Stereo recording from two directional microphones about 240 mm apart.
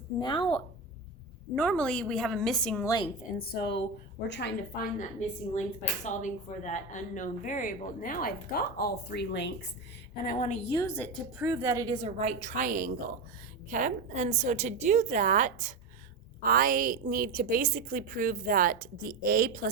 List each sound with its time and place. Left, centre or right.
0.2 s a woman's voice: centre
1.5 s a woman's voice: centre
3.2 s a woman's voice: left
5.5 s speech: left
10.2 s a woman's voice: left; by 11.1 s centre
11.3 s a woman's voice: centre; by 19.6 s right